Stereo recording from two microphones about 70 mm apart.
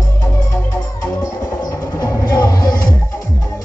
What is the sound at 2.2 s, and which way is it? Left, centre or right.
Music, left.